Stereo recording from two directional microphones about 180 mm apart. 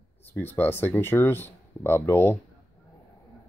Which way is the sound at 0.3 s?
10° left (ahead or behind).